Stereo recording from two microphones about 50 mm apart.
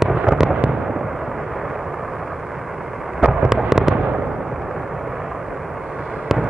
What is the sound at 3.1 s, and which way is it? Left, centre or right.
Fireworks, centre.